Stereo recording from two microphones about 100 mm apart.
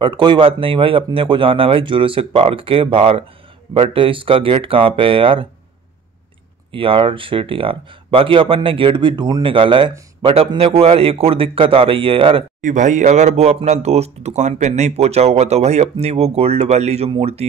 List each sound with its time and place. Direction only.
0.0 s speech: 50° right (ahead or behind)
6.7 s speech: 65° right (ahead or behind)
10.6 s speech: 80° right; by 12.4 s 65° right (ahead or behind)
13.3 s speech: 90° right